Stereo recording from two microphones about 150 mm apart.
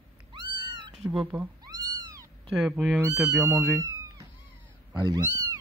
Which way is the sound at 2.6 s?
5° right (ahead or behind).